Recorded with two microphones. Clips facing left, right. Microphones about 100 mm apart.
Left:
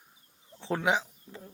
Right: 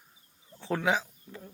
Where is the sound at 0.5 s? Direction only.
20° left (ahead or behind).